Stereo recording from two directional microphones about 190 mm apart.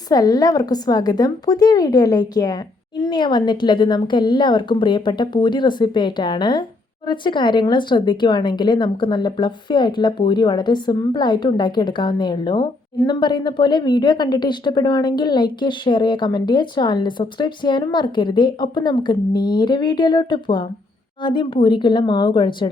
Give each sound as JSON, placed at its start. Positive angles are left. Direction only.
{"t": 0.1, "sound": "a woman's voice", "side_deg": 20}